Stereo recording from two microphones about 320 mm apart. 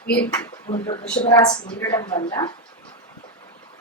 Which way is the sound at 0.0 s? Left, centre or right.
Left.